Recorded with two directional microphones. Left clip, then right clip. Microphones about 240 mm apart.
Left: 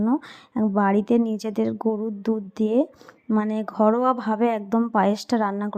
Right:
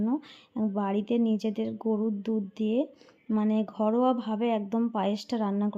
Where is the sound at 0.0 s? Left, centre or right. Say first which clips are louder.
Left 7 dB; centre.